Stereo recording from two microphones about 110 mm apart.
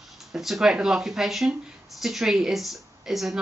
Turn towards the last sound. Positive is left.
turn(degrees=0)  # may be behind; listen again after turning